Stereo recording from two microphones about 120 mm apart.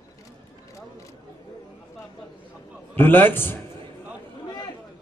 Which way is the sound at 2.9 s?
15° left (ahead or behind).